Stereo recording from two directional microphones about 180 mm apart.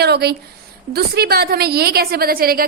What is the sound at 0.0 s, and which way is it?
A woman's voice, 65° right (ahead or behind).